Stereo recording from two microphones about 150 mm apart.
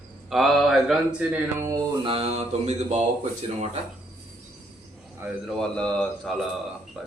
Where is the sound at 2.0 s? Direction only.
40° right (ahead or behind).